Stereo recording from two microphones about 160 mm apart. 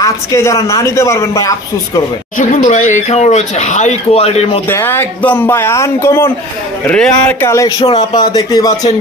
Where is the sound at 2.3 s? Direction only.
50° left (ahead or behind).